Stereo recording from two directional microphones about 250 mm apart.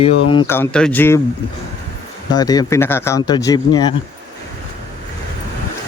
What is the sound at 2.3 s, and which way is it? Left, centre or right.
Speech, centre.